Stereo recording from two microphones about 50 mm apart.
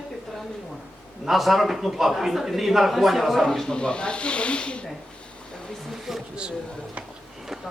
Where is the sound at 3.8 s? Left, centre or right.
Centre.